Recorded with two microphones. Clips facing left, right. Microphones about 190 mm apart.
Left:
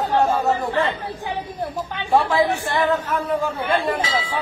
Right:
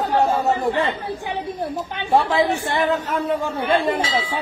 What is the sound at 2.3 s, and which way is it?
Speech, 25° right (ahead or behind).